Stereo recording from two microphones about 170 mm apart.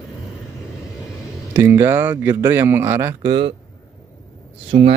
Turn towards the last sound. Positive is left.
turn(degrees=-40)  # may be behind; listen again after turning